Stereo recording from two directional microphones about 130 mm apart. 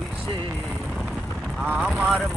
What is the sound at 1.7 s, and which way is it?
Speech, centre (ahead or behind).